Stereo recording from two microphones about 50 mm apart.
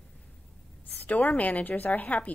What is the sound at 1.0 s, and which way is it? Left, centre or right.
A woman's voice, left.